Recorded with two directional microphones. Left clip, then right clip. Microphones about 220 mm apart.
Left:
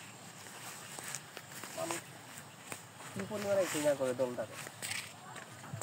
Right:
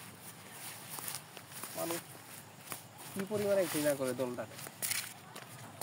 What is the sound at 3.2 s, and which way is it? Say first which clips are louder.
Speech: right 1 dB; 40° right (ahead or behind).